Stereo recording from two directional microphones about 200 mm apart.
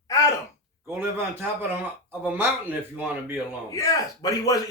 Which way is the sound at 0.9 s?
10° right (ahead or behind).